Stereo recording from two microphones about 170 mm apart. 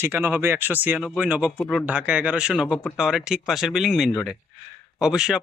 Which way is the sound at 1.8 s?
10° right (ahead or behind).